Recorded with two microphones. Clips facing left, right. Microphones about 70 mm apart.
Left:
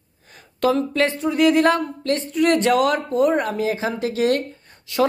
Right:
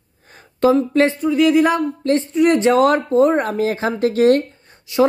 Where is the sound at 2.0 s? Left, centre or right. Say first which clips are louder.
Right 6 dB; right.